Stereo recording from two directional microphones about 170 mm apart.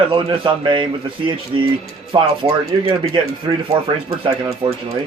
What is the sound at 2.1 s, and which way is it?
Speech, 25° right (ahead or behind).